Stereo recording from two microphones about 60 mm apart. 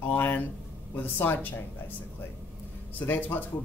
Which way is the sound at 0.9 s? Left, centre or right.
Left.